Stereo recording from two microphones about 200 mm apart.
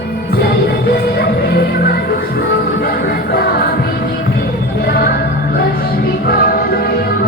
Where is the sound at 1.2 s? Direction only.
50° left (ahead or behind).